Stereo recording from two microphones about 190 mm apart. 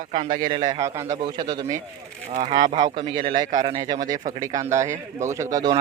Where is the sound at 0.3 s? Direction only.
20° right (ahead or behind).